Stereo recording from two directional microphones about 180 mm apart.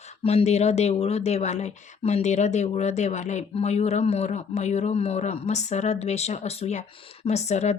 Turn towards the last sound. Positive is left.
turn(degrees=40)  # may be behind; listen again after turning